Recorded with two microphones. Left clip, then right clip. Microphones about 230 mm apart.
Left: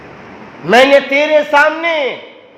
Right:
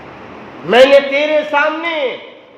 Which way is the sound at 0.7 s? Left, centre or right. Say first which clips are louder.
Even; left.